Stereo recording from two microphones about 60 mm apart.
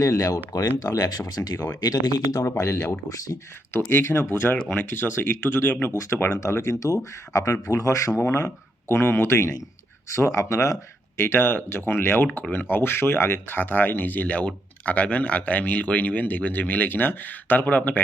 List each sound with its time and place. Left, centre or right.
0.0 s speech: left
1.2 s speech: left
1.8 s speech: left
2.4 s speech: left
3.7 s speech: left
6.3 s speech: left
8.2 s speech: left
11.2 s speech: left